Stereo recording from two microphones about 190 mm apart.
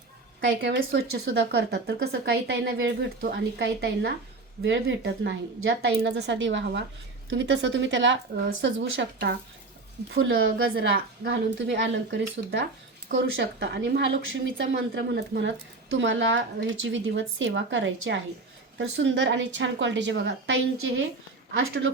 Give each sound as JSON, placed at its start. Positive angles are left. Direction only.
{"t": 0.4, "sound": "a woman's voice", "side_deg": -75}
{"t": 3.2, "sound": "a woman's voice", "side_deg": -55}
{"t": 4.6, "sound": "a woman's voice", "side_deg": -80}
{"t": 8.6, "sound": "a woman's voice", "side_deg": -65}
{"t": 14.6, "sound": "speech", "side_deg": -75}
{"t": 18.8, "sound": "a woman's voice", "side_deg": -80}
{"t": 21.5, "sound": "speech", "side_deg": -90}